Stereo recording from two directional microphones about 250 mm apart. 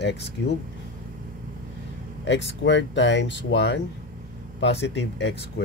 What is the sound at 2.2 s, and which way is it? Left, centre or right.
Speech, left.